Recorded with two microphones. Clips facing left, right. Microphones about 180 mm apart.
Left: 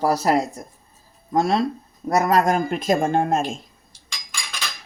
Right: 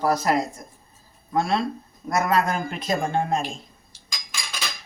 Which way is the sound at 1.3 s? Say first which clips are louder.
Left 3 dB; 40° left (ahead or behind).